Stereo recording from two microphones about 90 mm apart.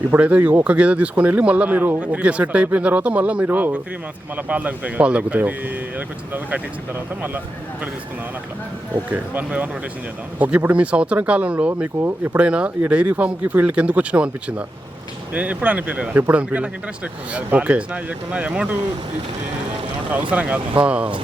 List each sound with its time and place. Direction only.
0.1 s speech: 15° right (ahead or behind)
9.0 s speech: 20° right (ahead or behind)
12.0 s speech: 25° right (ahead or behind)
12.4 s speech: 15° right (ahead or behind)
20.3 s speech: 15° right (ahead or behind)